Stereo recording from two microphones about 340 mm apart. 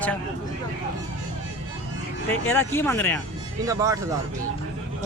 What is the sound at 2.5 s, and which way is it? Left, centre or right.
Speech, centre.